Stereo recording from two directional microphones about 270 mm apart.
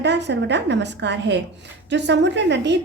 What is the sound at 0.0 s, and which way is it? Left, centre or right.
A woman's voice, right.